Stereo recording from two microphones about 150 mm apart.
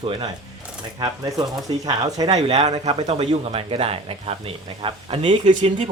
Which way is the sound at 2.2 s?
40° right (ahead or behind).